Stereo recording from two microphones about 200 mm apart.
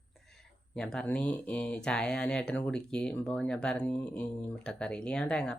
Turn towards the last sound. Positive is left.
turn(degrees=5)  # may be behind; listen again after turning